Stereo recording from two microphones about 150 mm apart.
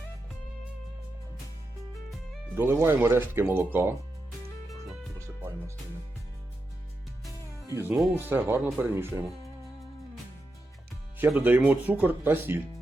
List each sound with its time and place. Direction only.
2.6 s speech: 15° right (ahead or behind)
7.7 s speech: 20° right (ahead or behind)
11.3 s speech: 10° right (ahead or behind)